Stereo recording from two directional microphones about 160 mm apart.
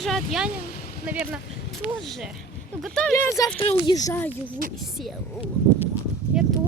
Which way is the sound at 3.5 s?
30° left (ahead or behind).